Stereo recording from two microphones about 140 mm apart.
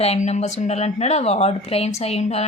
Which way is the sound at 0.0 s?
50° left (ahead or behind).